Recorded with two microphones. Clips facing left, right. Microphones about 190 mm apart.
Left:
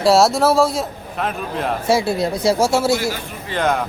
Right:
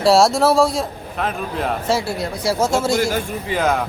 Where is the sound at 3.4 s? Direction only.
5° right (ahead or behind).